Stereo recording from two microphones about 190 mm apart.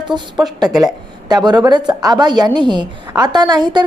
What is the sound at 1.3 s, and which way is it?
A woman's voice, 20° right (ahead or behind).